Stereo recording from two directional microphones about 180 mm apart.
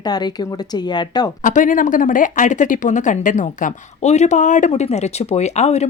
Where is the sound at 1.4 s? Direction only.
45° left (ahead or behind).